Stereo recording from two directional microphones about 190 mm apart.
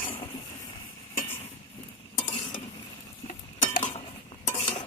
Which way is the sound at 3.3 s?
45° left (ahead or behind).